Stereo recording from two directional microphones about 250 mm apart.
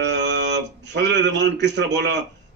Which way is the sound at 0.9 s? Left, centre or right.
Right.